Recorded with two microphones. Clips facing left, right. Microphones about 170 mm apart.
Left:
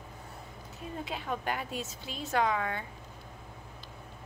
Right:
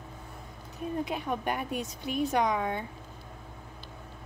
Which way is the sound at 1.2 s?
20° right (ahead or behind).